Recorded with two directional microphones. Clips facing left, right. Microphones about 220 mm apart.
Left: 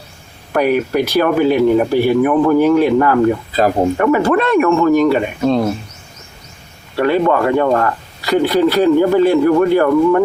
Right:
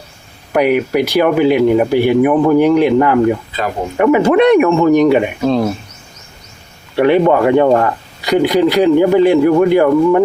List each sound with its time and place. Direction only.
0.5 s speech: 15° right (ahead or behind)
3.5 s speech: 40° left (ahead or behind)
3.9 s speech: 15° right (ahead or behind)
5.4 s speech: centre (ahead or behind)
6.9 s speech: 20° right (ahead or behind)